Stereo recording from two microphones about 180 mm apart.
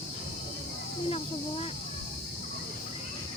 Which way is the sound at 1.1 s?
35° left (ahead or behind).